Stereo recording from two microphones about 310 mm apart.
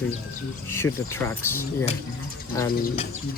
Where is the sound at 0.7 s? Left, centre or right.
Centre.